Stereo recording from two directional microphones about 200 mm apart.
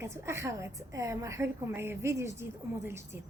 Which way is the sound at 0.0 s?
15° right (ahead or behind).